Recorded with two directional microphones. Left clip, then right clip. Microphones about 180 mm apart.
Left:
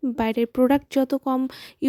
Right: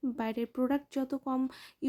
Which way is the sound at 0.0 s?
45° left (ahead or behind).